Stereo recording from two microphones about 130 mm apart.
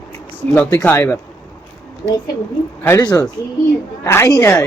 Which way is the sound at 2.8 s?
25° left (ahead or behind).